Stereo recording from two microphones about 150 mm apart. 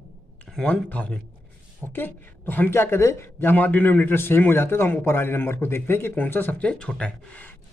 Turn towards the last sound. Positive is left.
turn(degrees=10)  # may be behind; listen again after turning